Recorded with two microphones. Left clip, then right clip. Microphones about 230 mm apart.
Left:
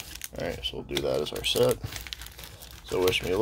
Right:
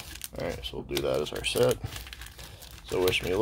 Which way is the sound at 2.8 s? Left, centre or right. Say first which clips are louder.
Left 1 dB; centre.